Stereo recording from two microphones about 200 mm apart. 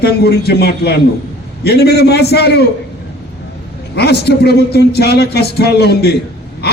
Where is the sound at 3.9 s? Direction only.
55° left (ahead or behind).